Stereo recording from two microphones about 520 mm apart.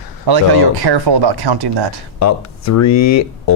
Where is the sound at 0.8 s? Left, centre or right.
Right.